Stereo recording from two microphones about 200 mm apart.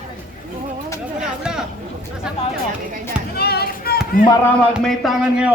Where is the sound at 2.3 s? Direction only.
5° right (ahead or behind).